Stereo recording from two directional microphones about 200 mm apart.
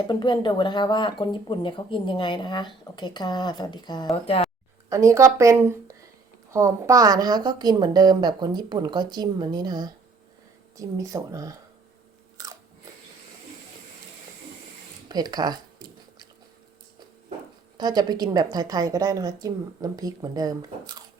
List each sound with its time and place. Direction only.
0.1 s speech: 20° left (ahead or behind)
4.9 s a woman's voice: 15° right (ahead or behind)
12.4 s biting: 20° right (ahead or behind)
15.1 s a woman's voice: 20° right (ahead or behind)
17.7 s a woman's voice: 20° right (ahead or behind)